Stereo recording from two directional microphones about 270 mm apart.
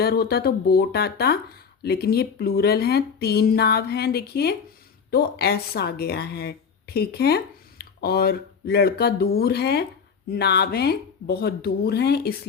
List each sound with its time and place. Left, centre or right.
0.0 s speech: left